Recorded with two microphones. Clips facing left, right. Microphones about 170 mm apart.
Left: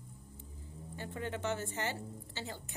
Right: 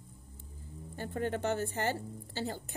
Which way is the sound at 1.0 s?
45° right (ahead or behind).